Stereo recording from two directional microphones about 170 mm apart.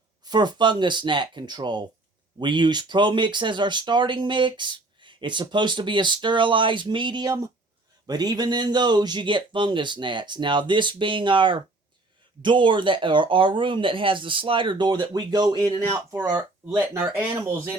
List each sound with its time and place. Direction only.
0.3 s speech: 25° right (ahead or behind)